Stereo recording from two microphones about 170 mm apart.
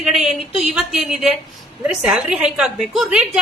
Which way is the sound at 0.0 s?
Centre (ahead or behind).